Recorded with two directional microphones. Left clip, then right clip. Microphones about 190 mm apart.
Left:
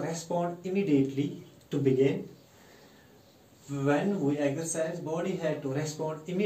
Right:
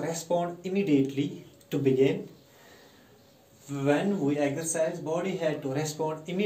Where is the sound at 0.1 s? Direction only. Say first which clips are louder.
Right 3 dB; 25° left (ahead or behind).